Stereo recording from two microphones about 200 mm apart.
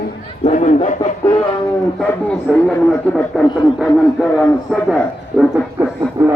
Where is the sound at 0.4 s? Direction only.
35° left (ahead or behind).